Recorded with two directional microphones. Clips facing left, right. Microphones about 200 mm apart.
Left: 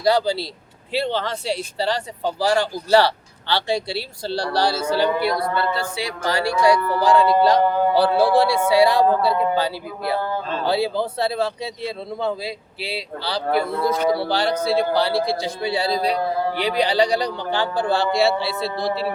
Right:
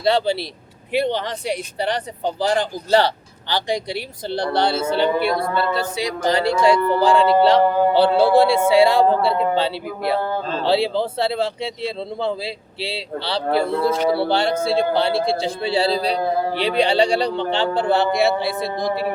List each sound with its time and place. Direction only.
0.0 s speech: 25° right (ahead or behind)